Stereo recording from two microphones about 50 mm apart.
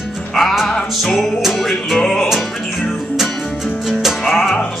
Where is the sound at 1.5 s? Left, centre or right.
Centre.